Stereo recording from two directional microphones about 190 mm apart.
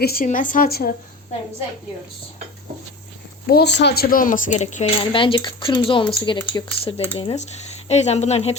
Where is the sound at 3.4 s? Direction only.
60° left (ahead or behind); by 4.8 s 40° left (ahead or behind).